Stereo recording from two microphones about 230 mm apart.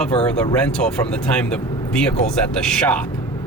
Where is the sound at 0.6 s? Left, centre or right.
Centre.